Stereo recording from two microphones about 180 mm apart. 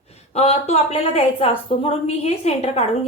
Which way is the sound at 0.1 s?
35° left (ahead or behind).